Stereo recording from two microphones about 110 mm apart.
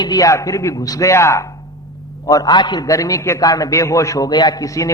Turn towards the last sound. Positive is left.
turn(degrees=30)  # may be behind; listen again after turning